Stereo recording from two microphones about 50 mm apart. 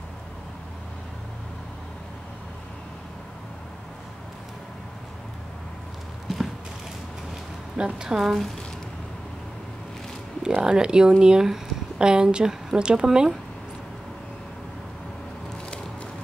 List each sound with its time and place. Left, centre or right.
6.2 s a sound: centre
7.7 s a woman's voice: centre
8.2 s speech: centre
10.6 s speech: centre